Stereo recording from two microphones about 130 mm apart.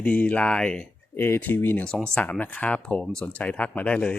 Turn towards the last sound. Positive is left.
turn(degrees=10)  # may be behind; listen again after turning